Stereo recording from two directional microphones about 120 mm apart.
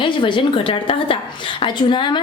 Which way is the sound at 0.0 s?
45° left (ahead or behind).